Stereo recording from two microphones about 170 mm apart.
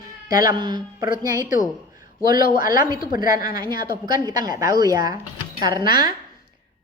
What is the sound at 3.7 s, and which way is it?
Speech, 60° left (ahead or behind).